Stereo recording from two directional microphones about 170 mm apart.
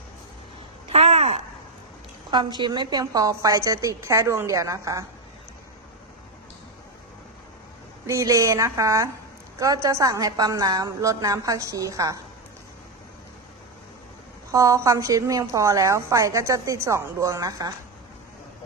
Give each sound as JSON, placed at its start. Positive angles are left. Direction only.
{"t": 0.9, "sound": "a sound", "side_deg": -40}
{"t": 2.3, "sound": "a woman's voice", "side_deg": -25}
{"t": 8.0, "sound": "a woman's voice", "side_deg": -20}
{"t": 14.5, "sound": "a woman's voice", "side_deg": -20}